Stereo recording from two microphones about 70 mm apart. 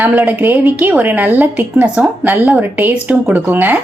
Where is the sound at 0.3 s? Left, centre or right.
Right.